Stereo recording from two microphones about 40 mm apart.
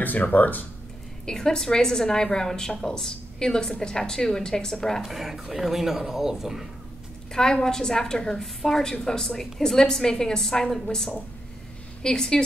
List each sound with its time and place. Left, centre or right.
0.0 s speech: left
1.2 s a woman's voice: centre
5.0 s speech: centre
7.6 s a woman's voice: centre